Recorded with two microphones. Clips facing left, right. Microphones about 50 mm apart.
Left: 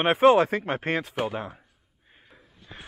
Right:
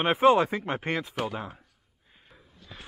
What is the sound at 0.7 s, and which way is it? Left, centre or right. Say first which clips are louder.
Speech: left 2 dB; left.